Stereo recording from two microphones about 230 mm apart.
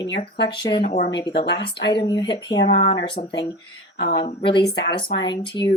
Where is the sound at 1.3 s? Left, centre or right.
Left.